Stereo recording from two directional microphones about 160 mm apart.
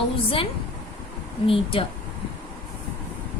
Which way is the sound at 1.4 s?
35° left (ahead or behind).